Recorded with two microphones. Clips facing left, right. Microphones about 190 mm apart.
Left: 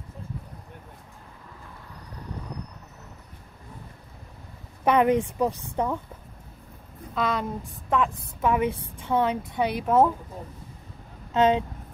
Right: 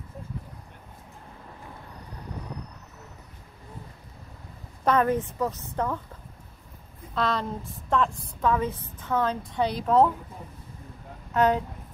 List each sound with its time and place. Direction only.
4.8 s a woman's voice: 15° left (ahead or behind)
7.2 s speech: centre (ahead or behind)
8.4 s a woman's voice: 15° left (ahead or behind)
11.3 s speech: 20° left (ahead or behind)